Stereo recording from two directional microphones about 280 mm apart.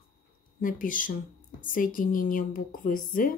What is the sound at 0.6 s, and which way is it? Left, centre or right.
A woman's voice, left.